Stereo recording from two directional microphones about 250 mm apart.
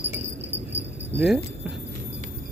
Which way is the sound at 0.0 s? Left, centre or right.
Centre.